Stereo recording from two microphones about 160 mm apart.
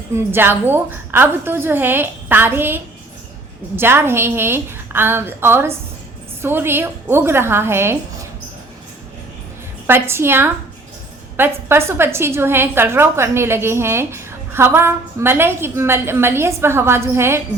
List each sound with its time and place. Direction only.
0.1 s a woman's voice: 15° right (ahead or behind)
9.8 s a woman's voice: 15° right (ahead or behind)